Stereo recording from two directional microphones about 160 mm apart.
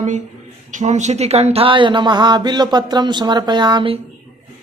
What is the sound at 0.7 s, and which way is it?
Speech, 50° right (ahead or behind).